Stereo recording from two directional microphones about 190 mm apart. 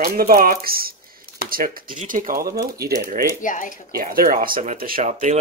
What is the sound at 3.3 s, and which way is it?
Speech, 45° left (ahead or behind).